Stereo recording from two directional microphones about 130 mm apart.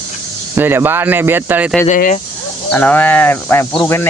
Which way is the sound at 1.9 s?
75° left (ahead or behind).